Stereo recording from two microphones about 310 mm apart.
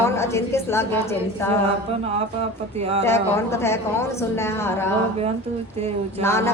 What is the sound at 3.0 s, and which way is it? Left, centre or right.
A woman's voice, centre.